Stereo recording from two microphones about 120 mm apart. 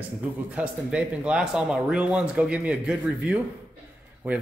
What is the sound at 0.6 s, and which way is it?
Speech, 10° right (ahead or behind).